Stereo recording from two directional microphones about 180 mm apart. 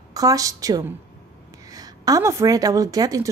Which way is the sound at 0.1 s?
20° right (ahead or behind).